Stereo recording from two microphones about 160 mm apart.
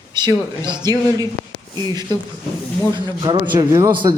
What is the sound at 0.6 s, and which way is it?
Speech, 25° right (ahead or behind).